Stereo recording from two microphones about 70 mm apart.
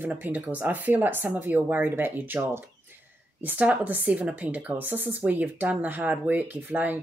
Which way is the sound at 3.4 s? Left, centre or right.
Right.